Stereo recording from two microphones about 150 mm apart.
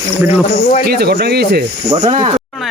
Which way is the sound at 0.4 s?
60° left (ahead or behind).